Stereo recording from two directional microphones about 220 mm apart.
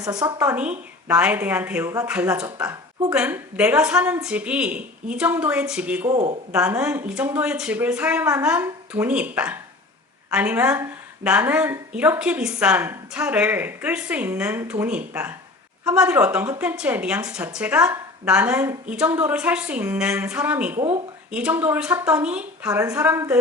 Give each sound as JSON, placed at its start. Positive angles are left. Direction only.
{"t": 0.0, "sound": "a woman's voice", "side_deg": -15}
{"t": 6.1, "sound": "speech", "side_deg": -30}
{"t": 6.5, "sound": "a woman's voice", "side_deg": -5}